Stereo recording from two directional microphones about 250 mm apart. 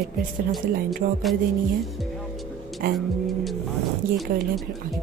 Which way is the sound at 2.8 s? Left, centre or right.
Right.